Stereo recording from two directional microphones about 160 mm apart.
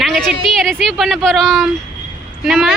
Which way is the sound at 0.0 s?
Centre (ahead or behind).